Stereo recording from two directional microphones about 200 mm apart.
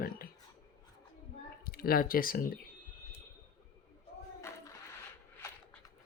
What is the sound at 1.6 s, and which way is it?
Speech, 45° left (ahead or behind).